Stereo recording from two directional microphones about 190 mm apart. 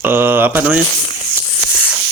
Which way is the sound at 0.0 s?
10° right (ahead or behind).